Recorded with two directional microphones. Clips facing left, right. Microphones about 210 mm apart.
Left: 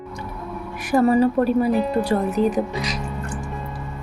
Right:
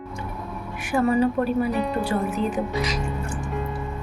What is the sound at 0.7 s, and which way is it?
Speech, 40° left (ahead or behind).